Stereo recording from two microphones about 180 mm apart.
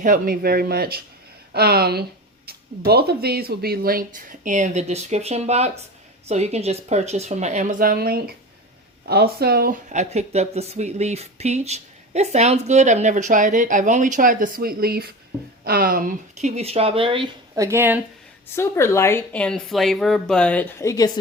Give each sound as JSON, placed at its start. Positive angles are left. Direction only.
{"t": 0.0, "sound": "speech", "side_deg": -50}
{"t": 16.6, "sound": "speech", "side_deg": -35}
{"t": 17.5, "sound": "speech", "side_deg": -15}
{"t": 18.5, "sound": "speech", "side_deg": 15}